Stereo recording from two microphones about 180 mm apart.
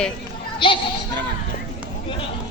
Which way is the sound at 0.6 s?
25° left (ahead or behind).